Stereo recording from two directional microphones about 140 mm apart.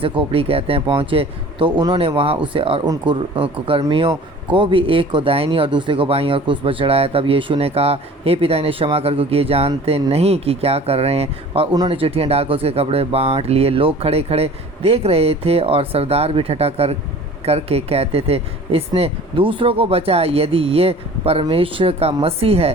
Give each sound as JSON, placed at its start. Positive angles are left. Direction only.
{"t": 0.0, "sound": "a man's voice", "side_deg": -40}